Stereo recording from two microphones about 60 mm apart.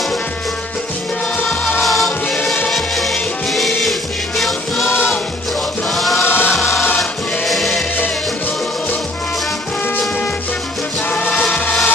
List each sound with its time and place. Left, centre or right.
1.8 s music: centre
4.8 s music: left
5.9 s chant: centre
6.2 s music: left
6.5 s music: centre
7.0 s choir: centre
11.1 s music: left